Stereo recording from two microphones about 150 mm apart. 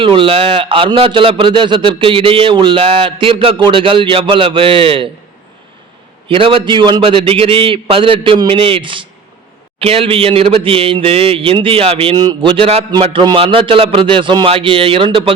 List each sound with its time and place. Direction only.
0.0 s a man's voice: 35° right (ahead or behind)
6.2 s a man's voice: 35° right (ahead or behind)